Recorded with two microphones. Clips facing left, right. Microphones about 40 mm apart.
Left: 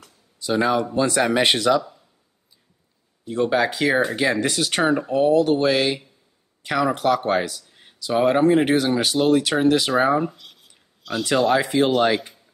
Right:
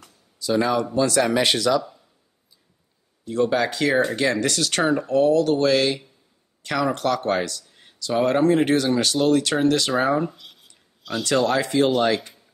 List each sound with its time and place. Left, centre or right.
0.4 s speech: left
3.3 s speech: centre
11.2 s speech: centre